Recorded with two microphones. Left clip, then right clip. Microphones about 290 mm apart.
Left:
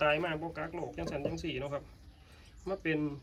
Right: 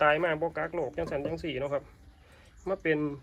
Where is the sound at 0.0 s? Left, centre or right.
Centre.